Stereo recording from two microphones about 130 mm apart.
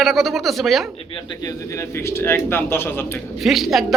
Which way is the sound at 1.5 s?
20° left (ahead or behind).